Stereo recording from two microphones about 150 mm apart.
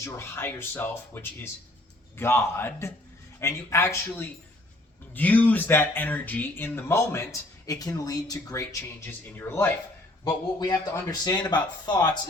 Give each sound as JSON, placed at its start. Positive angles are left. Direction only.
{"t": 0.0, "sound": "speech", "side_deg": 15}
{"t": 10.6, "sound": "a man's voice", "side_deg": 25}